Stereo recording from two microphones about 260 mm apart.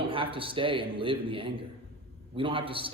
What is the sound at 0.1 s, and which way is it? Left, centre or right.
A man's voice, centre.